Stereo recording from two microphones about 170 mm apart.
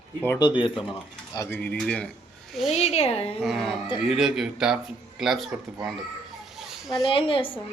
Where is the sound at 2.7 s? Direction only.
40° left (ahead or behind).